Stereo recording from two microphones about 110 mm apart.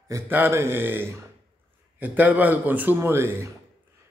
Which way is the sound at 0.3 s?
20° right (ahead or behind).